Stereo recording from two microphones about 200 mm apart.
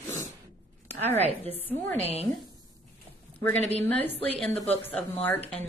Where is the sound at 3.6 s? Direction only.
35° right (ahead or behind).